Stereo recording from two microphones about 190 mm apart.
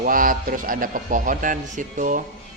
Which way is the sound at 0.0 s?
45° right (ahead or behind).